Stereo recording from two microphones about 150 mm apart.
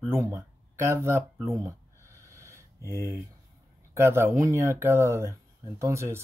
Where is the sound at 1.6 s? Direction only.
20° right (ahead or behind).